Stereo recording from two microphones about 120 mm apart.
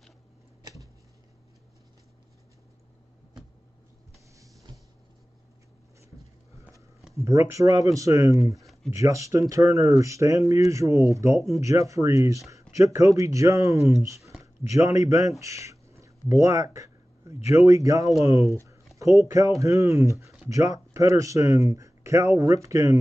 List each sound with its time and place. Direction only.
7.2 s speech: 25° right (ahead or behind)
18.5 s a sound: 25° right (ahead or behind)
18.9 s speech: 25° right (ahead or behind)